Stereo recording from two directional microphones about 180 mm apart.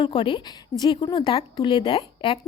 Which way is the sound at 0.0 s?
30° left (ahead or behind).